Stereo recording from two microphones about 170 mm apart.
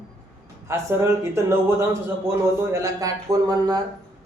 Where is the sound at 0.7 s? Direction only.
15° right (ahead or behind).